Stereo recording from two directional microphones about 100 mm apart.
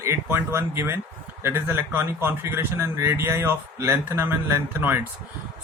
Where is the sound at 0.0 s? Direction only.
25° right (ahead or behind).